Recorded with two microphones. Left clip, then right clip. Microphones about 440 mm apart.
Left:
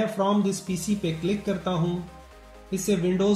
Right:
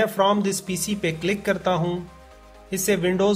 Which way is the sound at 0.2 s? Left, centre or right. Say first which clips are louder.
Right 5 dB; centre.